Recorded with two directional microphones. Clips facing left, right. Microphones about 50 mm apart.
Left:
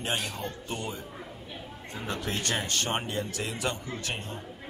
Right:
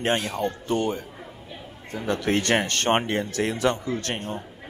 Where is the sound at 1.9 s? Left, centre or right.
Right.